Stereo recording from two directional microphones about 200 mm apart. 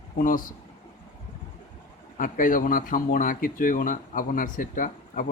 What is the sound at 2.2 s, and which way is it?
Speech, 40° left (ahead or behind).